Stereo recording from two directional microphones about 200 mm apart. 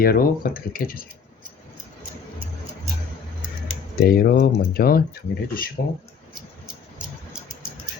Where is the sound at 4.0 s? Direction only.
50° left (ahead or behind).